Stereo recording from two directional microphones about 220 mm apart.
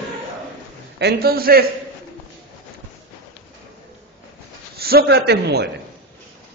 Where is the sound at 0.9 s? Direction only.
45° right (ahead or behind).